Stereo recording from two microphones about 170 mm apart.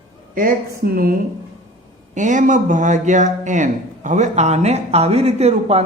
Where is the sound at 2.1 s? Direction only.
45° right (ahead or behind).